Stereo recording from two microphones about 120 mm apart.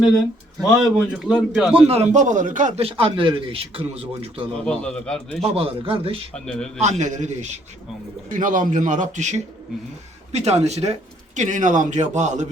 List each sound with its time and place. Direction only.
0.8 s a man's voice: 5° right (ahead or behind)
1.7 s speech: 60° right (ahead or behind); by 2.8 s 90° right
2.8 s a man's voice: 45° right (ahead or behind)
4.6 s a man's voice: 10° left (ahead or behind)
5.4 s a man's voice: 55° right (ahead or behind)
6.4 s a man's voice: 5° left (ahead or behind)
6.7 s a man's voice: 70° right (ahead or behind)
8.3 s speech: 90° right
10.3 s speech: 65° right (ahead or behind)
11.3 s speech: 90° right
12.1 s a man's voice: 80° right